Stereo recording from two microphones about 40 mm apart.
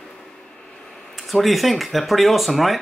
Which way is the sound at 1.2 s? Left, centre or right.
Centre.